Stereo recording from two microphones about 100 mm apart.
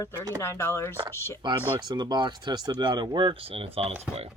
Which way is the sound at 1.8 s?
45° right (ahead or behind).